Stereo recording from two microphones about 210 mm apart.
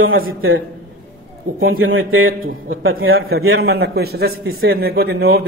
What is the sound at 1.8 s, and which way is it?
A man's voice, 75° right (ahead or behind).